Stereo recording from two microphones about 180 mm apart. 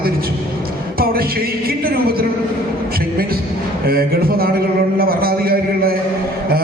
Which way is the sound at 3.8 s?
60° right (ahead or behind).